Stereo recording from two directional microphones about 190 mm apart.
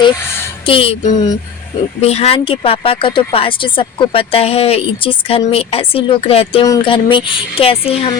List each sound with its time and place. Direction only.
0.6 s speech: 30° left (ahead or behind)